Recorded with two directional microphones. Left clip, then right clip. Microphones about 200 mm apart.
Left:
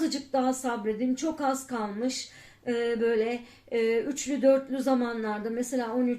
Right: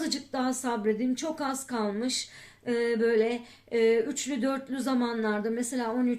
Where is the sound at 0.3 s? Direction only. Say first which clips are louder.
Left 4 dB; 40° right (ahead or behind).